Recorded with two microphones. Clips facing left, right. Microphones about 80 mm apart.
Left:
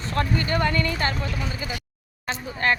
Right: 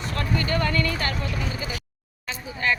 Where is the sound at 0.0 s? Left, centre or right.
Left.